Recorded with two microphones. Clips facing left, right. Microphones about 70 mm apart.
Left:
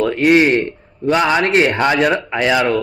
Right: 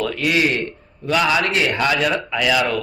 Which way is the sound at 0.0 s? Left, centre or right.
Left.